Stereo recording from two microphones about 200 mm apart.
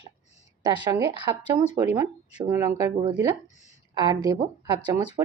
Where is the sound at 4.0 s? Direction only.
20° right (ahead or behind).